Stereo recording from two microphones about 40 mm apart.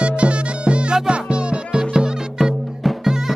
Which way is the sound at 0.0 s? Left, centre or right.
Right.